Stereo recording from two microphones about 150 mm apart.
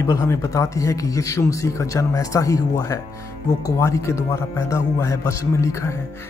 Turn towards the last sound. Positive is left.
turn(degrees=20)  # may be behind; listen again after turning